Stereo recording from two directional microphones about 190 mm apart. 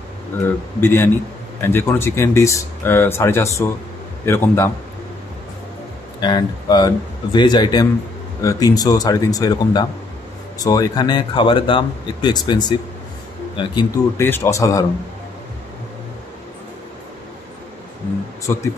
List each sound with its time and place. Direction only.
0.7 s speech: 10° left (ahead or behind)
6.2 s speech: 20° left (ahead or behind)
18.5 s speech: 15° left (ahead or behind)